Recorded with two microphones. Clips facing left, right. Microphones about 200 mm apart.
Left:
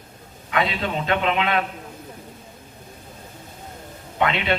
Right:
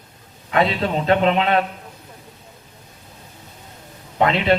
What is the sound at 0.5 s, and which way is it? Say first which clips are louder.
A man's voice: right 4 dB; 35° right (ahead or behind).